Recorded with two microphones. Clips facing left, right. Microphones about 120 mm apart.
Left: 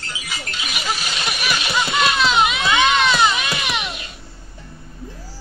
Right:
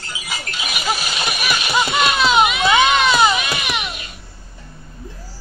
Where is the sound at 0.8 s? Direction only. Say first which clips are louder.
Right 3 dB; 10° right (ahead or behind).